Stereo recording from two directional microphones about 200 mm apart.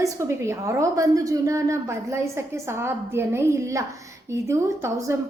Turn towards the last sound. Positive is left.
turn(degrees=-15)  # may be behind; listen again after turning